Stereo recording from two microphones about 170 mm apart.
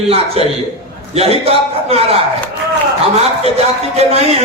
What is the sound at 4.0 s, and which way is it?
Speech, 35° right (ahead or behind).